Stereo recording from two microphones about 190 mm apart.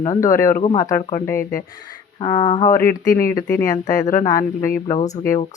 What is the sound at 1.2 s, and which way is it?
Speech, 15° left (ahead or behind).